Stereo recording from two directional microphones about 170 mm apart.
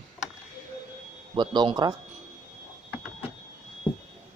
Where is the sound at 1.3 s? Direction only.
25° right (ahead or behind).